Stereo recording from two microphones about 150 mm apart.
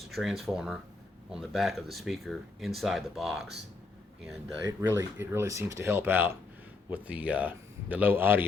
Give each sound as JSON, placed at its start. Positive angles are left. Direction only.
{"t": 0.0, "sound": "speech", "side_deg": 0}
{"t": 4.6, "sound": "speech", "side_deg": -15}